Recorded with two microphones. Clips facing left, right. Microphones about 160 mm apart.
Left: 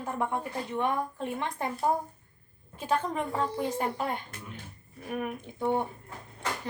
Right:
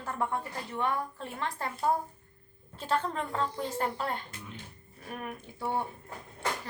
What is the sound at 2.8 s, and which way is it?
A woman's voice, 15° left (ahead or behind).